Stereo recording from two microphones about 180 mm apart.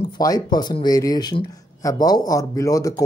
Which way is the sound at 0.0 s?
20° left (ahead or behind).